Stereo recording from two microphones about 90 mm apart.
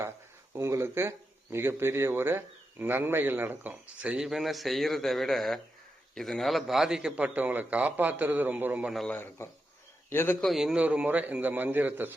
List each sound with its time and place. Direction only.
0.5 s a man's voice: 30° right (ahead or behind); by 7.3 s 10° right (ahead or behind)
7.3 s speech: 20° right (ahead or behind)
9.1 s a man's voice: 25° left (ahead or behind)
10.4 s a man's voice: 5° right (ahead or behind)
10.8 s speech: 15° right (ahead or behind)